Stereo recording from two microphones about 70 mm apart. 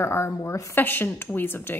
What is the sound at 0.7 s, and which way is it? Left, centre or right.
Speech, left.